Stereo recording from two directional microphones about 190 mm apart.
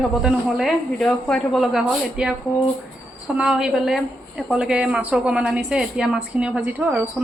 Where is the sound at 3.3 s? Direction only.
5° right (ahead or behind).